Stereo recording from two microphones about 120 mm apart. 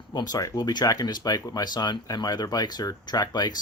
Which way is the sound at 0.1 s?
35° left (ahead or behind).